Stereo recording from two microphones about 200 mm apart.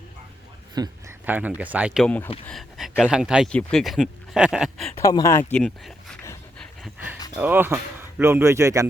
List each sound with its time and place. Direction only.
0.7 s a sound: 20° right (ahead or behind)
1.2 s speech: 10° right (ahead or behind)
5.0 s speech: 15° left (ahead or behind)
5.5 s speech: centre (ahead or behind)
7.3 s speech: 10° right (ahead or behind)